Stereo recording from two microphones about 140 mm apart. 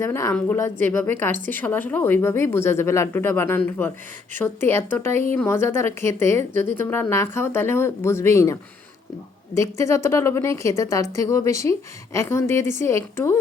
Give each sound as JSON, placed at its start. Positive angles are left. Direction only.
{"t": 0.0, "sound": "a woman's voice", "side_deg": 20}
{"t": 9.6, "sound": "a woman's voice", "side_deg": 20}